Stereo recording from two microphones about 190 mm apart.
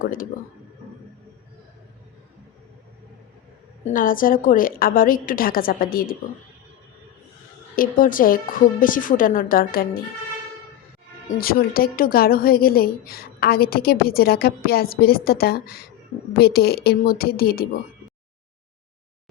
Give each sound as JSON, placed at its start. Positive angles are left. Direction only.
{"t": 0.0, "sound": "a woman's voice", "side_deg": 45}
{"t": 3.9, "sound": "a woman's voice", "side_deg": 45}
{"t": 7.8, "sound": "a woman's voice", "side_deg": 45}
{"t": 11.3, "sound": "a woman's voice", "side_deg": 50}